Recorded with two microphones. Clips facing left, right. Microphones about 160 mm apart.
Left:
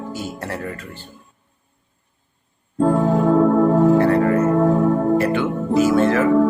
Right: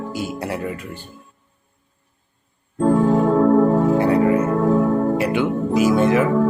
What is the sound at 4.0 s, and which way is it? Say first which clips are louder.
Music: left 1 dB; 10° right (ahead or behind).